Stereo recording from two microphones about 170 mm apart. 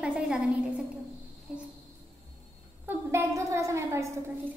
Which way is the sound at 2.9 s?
15° right (ahead or behind).